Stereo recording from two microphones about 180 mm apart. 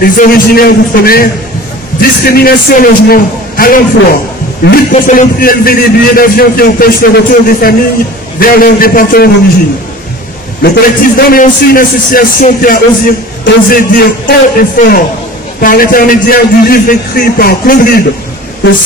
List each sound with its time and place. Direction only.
0.0 s a man's voice: 55° left (ahead or behind)
10.6 s a man's voice: 60° left (ahead or behind)